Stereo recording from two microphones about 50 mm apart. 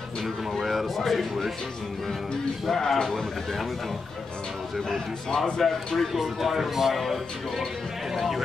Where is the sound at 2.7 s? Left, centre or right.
Centre.